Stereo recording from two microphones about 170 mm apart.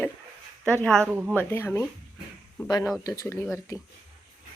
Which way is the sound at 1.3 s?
15° left (ahead or behind).